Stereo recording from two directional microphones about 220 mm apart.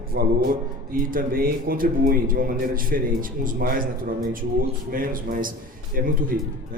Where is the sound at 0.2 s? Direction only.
45° right (ahead or behind).